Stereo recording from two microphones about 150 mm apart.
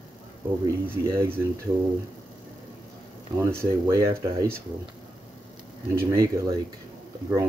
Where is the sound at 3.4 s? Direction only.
20° right (ahead or behind).